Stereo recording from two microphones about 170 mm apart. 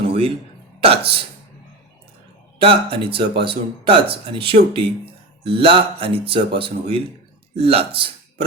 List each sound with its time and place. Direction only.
0.1 s a sound: 30° right (ahead or behind)
0.8 s speech: 35° right (ahead or behind)
2.6 s speech: 30° right (ahead or behind)